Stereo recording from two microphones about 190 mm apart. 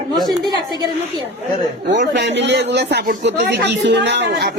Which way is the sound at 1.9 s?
70° right (ahead or behind).